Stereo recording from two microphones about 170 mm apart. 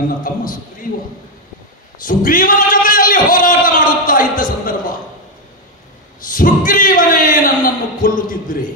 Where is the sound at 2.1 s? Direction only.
55° left (ahead or behind).